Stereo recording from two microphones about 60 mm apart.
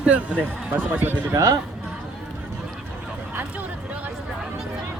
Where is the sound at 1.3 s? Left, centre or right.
Right.